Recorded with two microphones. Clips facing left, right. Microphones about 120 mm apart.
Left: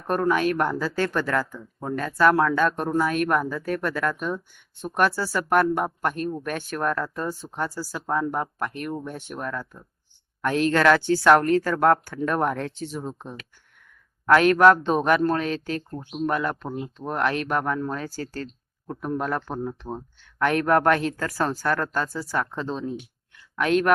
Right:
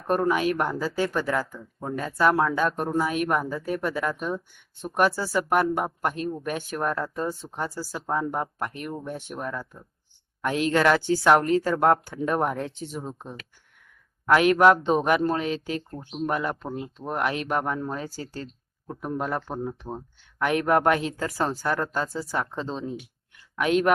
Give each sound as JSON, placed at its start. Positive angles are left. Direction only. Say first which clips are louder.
{"t": 0.6, "sound": "speech", "louder": "left 1 dB", "side_deg": -15}
{"t": 14.3, "sound": "speech", "louder": "left 2 dB", "side_deg": -15}